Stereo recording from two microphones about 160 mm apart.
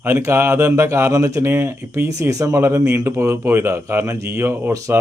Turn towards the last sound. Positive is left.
turn(degrees=-20)  # may be behind; listen again after turning